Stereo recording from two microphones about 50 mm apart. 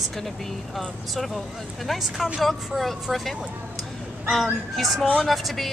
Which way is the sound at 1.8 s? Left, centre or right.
Centre.